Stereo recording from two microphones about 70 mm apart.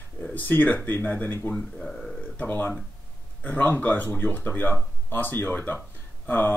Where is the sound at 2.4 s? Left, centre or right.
Left.